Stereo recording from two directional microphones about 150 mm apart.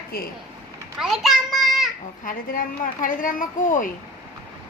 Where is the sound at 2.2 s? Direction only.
65° left (ahead or behind).